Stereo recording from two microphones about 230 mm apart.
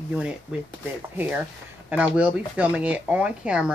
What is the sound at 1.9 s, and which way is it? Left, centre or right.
Speech, centre.